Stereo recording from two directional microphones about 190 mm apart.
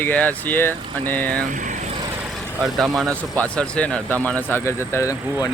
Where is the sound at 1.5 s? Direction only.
40° right (ahead or behind).